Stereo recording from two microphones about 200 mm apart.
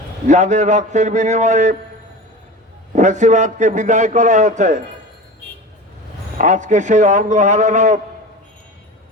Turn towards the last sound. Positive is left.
turn(degrees=-35)  # may be behind; listen again after turning